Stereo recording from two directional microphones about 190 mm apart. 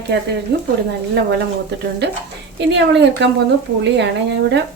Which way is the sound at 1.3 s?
60° right (ahead or behind).